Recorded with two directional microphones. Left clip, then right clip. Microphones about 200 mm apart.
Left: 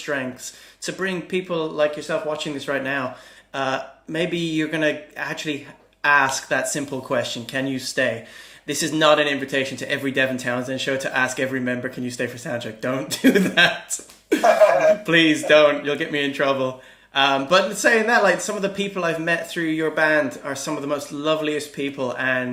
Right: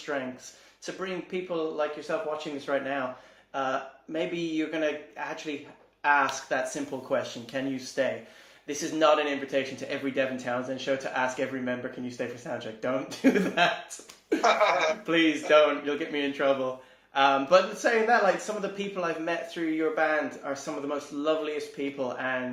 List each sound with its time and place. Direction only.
0.1 s speech: 35° left (ahead or behind)
14.4 s speech: 10° right (ahead or behind)
15.0 s speech: 35° left (ahead or behind)